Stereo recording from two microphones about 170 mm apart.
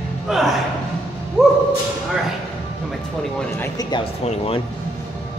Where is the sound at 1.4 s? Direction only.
Centre (ahead or behind).